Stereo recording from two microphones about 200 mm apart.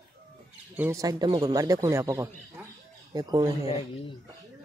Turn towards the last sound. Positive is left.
turn(degrees=-20)  # may be behind; listen again after turning